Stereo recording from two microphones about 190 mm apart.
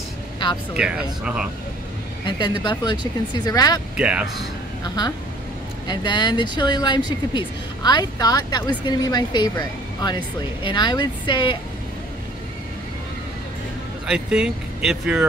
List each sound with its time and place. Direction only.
0.7 s speech: 5° right (ahead or behind)
2.2 s speech: 25° left (ahead or behind)
3.9 s speech: 5° right (ahead or behind)
4.8 s speech: 20° left (ahead or behind)
14.0 s speech: 5° right (ahead or behind)